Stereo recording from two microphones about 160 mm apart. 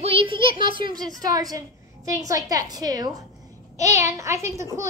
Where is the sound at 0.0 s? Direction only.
35° right (ahead or behind).